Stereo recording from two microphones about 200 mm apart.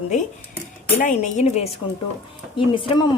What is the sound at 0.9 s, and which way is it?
Speech, 35° left (ahead or behind).